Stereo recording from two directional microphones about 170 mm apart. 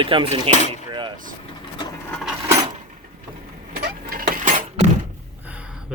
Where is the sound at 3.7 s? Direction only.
60° right (ahead or behind).